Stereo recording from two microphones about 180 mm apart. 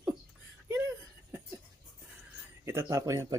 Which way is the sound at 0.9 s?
10° right (ahead or behind).